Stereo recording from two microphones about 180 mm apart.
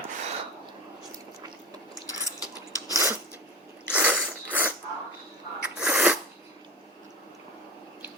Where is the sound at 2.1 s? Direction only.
20° left (ahead or behind).